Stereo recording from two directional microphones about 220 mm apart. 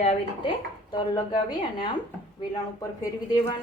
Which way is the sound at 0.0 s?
30° left (ahead or behind).